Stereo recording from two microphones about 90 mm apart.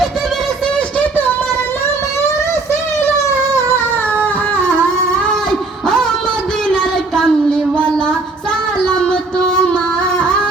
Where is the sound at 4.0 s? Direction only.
20° left (ahead or behind).